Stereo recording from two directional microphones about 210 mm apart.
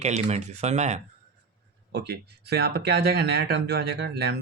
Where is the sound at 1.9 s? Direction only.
50° right (ahead or behind).